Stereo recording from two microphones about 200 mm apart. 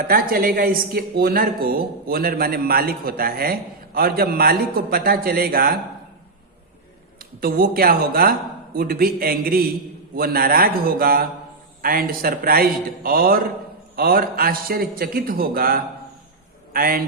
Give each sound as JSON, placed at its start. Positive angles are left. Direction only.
{"t": 0.1, "sound": "speech", "side_deg": -45}
{"t": 7.2, "sound": "a man's voice", "side_deg": -45}